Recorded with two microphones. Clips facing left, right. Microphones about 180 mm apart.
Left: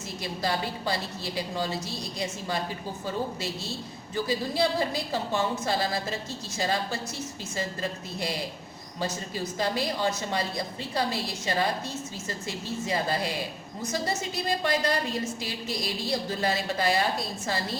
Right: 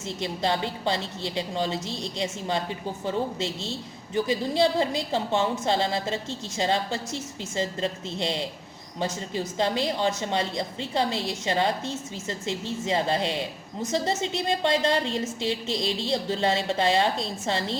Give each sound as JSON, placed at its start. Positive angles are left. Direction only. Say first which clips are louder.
{"t": 0.2, "sound": "a woman's voice", "louder": "right 3 dB", "side_deg": -20}